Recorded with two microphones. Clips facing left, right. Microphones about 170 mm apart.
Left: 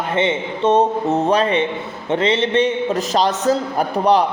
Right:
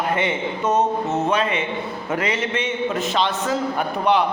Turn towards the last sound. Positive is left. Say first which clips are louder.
# left 4 dB
turn(degrees=35)  # may be behind; listen again after turning